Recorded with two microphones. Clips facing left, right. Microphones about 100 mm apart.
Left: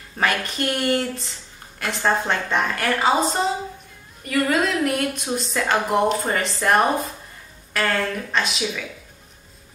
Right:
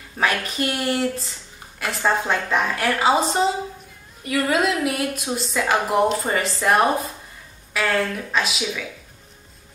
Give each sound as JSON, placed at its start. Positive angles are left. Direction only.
{"t": 0.2, "sound": "a woman's voice", "side_deg": -5}
{"t": 4.2, "sound": "a woman's voice", "side_deg": -15}
{"t": 4.6, "sound": "a woman's voice", "side_deg": -5}